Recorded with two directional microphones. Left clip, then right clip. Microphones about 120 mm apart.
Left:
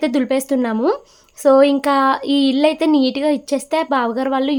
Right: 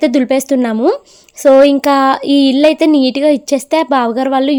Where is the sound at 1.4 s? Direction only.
45° right (ahead or behind).